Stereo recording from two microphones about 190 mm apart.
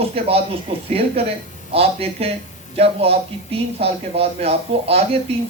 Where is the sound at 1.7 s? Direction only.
30° right (ahead or behind).